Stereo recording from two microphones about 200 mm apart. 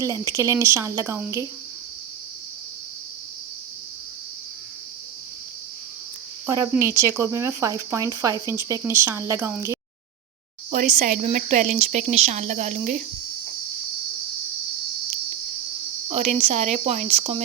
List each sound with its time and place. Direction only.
0.3 s speech: 15° right (ahead or behind)
6.4 s speech: 15° right (ahead or behind)
10.7 s a woman's voice: 35° right (ahead or behind)
16.0 s a woman's voice: 35° right (ahead or behind)